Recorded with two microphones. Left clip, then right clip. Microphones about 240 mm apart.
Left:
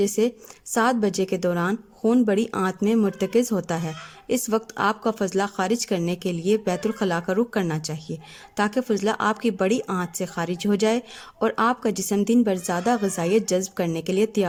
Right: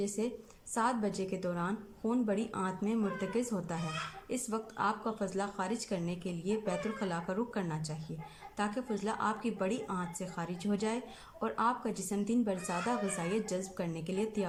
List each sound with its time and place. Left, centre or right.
0.2 s speech: left